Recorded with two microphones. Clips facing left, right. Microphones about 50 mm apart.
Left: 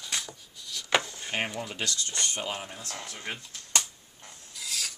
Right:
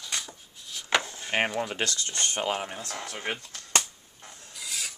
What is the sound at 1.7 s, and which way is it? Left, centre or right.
Speech, right.